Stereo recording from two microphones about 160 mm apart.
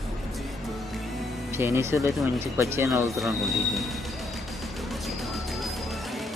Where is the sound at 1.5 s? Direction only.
15° right (ahead or behind).